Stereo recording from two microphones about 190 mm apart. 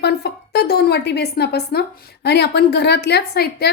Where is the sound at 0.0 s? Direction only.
60° left (ahead or behind).